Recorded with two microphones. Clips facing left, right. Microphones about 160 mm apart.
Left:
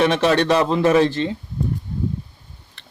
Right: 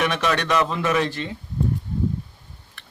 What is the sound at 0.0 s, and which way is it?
Speech, 30° left (ahead or behind).